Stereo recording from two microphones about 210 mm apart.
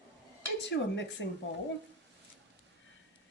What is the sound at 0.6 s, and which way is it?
Speech, 60° left (ahead or behind).